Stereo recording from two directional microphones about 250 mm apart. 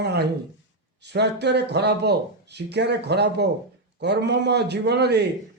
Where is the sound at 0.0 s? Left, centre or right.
Right.